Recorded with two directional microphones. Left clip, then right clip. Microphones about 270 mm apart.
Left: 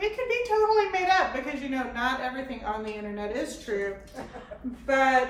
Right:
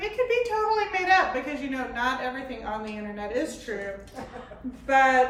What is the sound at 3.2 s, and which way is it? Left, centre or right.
Speech, centre.